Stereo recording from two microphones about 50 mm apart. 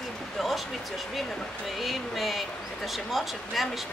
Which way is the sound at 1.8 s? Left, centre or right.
Centre.